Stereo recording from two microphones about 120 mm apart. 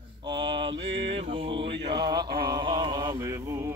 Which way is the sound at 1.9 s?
35° right (ahead or behind).